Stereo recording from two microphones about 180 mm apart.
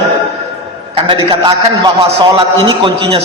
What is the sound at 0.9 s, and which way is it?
A man's voice, 30° right (ahead or behind).